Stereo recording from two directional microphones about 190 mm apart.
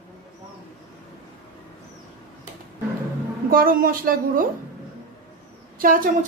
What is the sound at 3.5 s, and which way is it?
Speech, 50° right (ahead or behind).